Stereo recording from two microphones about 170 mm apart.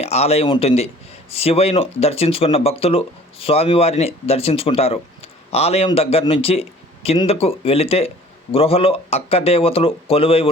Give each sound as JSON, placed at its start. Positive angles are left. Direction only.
{"t": 0.0, "sound": "speech", "side_deg": 40}